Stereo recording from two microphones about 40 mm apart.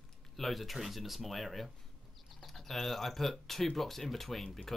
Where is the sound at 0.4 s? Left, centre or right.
Centre.